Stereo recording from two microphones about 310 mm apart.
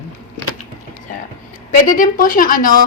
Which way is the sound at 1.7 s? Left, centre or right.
Left.